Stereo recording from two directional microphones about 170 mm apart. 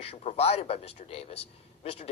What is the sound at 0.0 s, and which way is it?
Speech, 35° left (ahead or behind).